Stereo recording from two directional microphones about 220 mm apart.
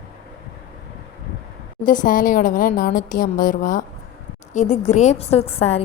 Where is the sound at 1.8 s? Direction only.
35° left (ahead or behind).